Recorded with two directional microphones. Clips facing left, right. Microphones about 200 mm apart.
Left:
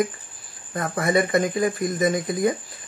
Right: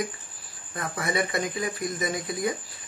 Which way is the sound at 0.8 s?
45° left (ahead or behind).